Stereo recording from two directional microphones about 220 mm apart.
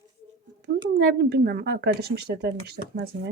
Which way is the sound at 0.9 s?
45° right (ahead or behind).